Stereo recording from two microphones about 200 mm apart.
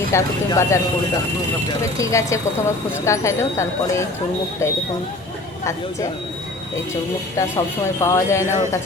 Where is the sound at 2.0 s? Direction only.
15° left (ahead or behind).